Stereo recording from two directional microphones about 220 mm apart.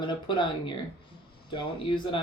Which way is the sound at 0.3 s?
20° left (ahead or behind).